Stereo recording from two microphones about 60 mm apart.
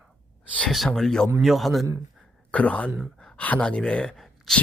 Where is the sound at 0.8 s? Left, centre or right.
Centre.